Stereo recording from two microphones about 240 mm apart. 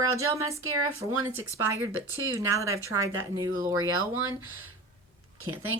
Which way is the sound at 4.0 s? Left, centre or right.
Right.